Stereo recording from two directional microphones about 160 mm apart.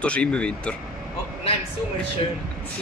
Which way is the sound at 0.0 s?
5° left (ahead or behind).